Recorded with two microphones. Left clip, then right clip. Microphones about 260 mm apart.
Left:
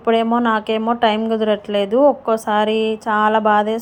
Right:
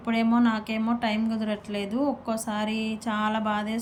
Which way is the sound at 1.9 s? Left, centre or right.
Left.